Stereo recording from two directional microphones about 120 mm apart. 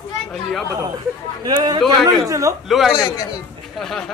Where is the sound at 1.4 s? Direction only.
35° right (ahead or behind).